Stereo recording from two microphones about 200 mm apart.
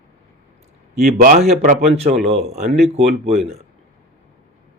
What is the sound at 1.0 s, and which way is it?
Speech, 45° right (ahead or behind).